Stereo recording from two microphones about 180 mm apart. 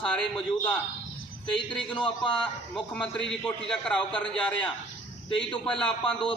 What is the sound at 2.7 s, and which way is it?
A man's voice, 5° left (ahead or behind).